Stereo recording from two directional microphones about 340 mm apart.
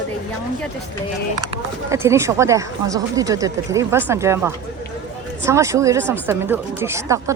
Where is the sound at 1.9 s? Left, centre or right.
Centre.